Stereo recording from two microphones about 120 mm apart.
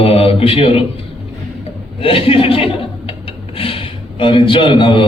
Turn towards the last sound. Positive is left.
turn(degrees=45)  # may be behind; listen again after turning